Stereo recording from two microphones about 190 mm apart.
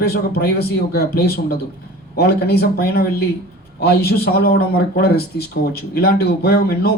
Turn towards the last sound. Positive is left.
turn(degrees=55)  # may be behind; listen again after turning